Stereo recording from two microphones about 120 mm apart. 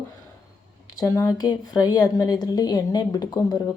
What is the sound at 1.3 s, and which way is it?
A woman's voice, 35° left (ahead or behind).